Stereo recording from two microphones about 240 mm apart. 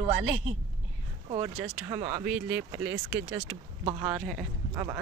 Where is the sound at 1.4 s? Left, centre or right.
Centre.